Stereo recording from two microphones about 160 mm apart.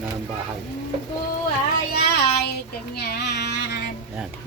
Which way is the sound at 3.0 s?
90° left.